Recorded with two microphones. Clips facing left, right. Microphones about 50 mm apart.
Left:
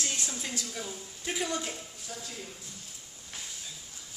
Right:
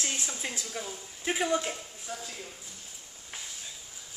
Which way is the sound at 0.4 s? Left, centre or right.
Centre.